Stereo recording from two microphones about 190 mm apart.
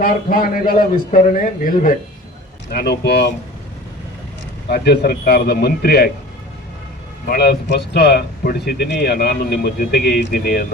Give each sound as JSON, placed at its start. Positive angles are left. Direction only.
{"t": 0.0, "sound": "a man's voice", "side_deg": 45}
{"t": 2.6, "sound": "speech", "side_deg": 55}
{"t": 4.7, "sound": "speech", "side_deg": 60}
{"t": 7.3, "sound": "speech", "side_deg": 60}